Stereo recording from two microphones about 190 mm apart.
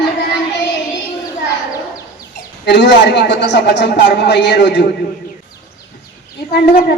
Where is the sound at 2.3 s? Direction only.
65° left (ahead or behind).